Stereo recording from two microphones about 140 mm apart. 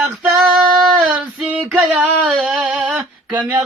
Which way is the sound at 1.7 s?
10° right (ahead or behind).